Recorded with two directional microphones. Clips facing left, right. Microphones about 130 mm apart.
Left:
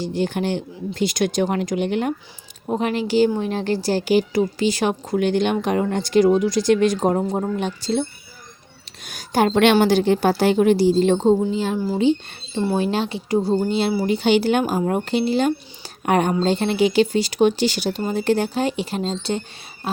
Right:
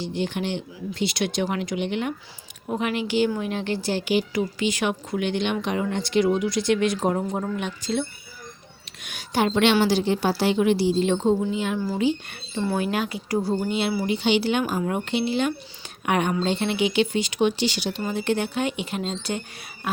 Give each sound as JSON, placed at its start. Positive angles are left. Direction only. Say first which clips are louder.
{"t": 0.0, "sound": "a woman's voice", "louder": "left 4 dB", "side_deg": 45}
{"t": 9.0, "sound": "a woman's voice", "louder": "left 4 dB", "side_deg": 40}
{"t": 13.7, "sound": "speech", "louder": "left 4 dB", "side_deg": 35}
{"t": 14.1, "sound": "speech", "louder": "left 5 dB", "side_deg": 45}